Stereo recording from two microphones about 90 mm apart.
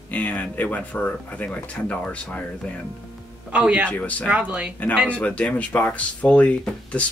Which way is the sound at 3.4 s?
10° right (ahead or behind).